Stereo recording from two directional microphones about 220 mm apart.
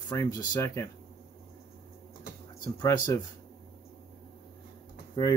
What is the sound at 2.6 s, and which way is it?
Speech, 20° left (ahead or behind).